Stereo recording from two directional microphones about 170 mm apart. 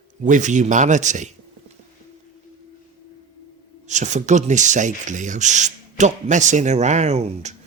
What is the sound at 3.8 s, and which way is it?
Speech, 45° right (ahead or behind).